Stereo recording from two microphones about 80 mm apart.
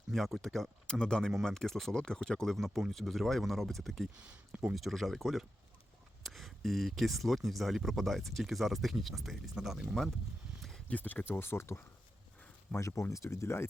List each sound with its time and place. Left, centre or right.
0.1 s speech: centre
4.2 s speech: centre
4.7 s speech: centre
10.8 s speech: centre; by 13.7 s left